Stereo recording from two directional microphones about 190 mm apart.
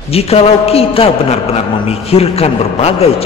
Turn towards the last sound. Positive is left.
turn(degrees=30)  # may be behind; listen again after turning